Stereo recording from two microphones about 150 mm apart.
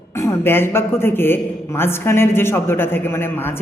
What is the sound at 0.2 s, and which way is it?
A man's voice, 15° left (ahead or behind).